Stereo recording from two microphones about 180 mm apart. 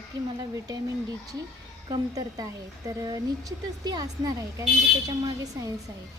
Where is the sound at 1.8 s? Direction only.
25° right (ahead or behind).